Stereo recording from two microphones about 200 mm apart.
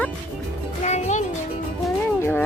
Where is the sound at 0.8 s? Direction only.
35° left (ahead or behind).